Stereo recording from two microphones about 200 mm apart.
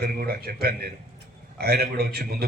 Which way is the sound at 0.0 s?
50° right (ahead or behind).